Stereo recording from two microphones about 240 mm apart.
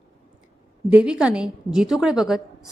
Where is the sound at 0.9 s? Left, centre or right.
Centre.